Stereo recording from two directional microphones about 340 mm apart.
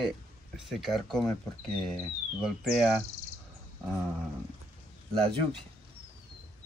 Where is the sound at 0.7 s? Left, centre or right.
Centre.